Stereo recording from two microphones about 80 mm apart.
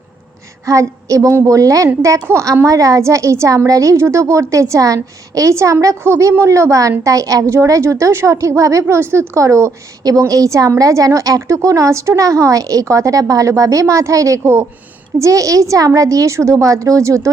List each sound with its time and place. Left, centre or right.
0.7 s a woman's voice: right
10.0 s a woman's voice: right